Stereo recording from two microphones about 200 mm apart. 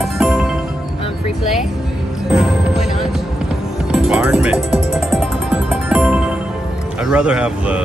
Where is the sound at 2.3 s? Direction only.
Centre (ahead or behind).